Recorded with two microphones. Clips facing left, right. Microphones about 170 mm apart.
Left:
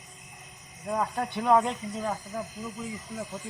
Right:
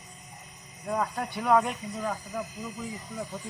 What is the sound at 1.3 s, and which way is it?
Speech, 20° left (ahead or behind).